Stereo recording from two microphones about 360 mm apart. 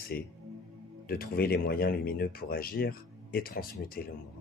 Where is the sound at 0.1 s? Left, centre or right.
Left.